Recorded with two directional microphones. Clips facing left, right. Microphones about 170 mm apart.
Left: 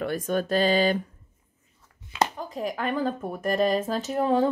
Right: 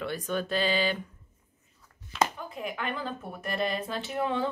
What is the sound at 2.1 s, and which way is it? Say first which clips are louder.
Speech: left 2 dB; 40° left (ahead or behind).